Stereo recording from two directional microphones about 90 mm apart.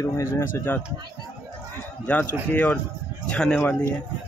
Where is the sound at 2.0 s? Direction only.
20° left (ahead or behind).